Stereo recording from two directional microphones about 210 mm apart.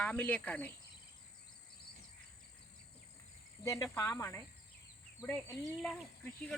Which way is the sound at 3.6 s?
15° left (ahead or behind).